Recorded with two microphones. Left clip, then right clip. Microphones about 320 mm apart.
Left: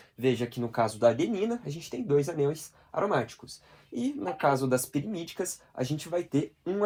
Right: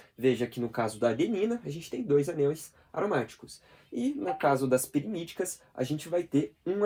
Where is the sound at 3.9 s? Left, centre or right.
Left.